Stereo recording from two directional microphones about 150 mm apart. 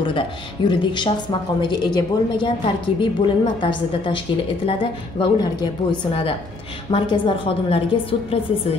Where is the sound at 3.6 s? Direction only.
35° left (ahead or behind).